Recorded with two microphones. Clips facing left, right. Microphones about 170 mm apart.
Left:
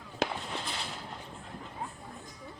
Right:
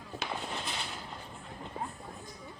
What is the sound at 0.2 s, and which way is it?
Fireworks, 90° left.